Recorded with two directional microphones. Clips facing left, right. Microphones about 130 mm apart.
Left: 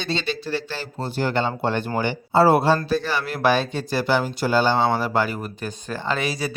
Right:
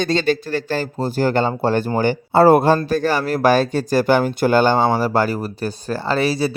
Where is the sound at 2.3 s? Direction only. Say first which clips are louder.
Right 4 dB; 50° right (ahead or behind).